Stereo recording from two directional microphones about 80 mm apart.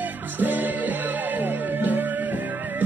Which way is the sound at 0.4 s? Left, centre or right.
Right.